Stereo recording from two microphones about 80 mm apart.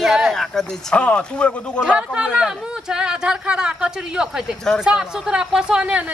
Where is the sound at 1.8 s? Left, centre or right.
Centre.